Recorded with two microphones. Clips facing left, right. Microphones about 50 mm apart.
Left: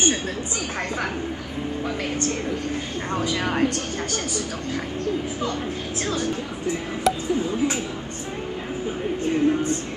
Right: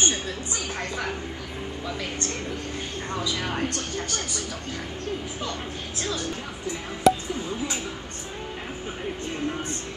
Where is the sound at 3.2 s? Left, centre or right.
Left.